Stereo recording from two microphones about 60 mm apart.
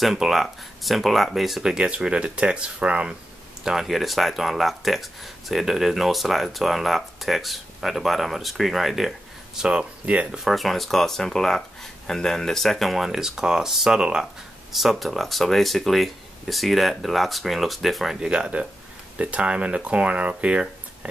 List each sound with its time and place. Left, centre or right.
0.0 s speech: centre
3.6 s speech: centre
9.6 s speech: centre
10.4 s speech: centre; by 20.6 s right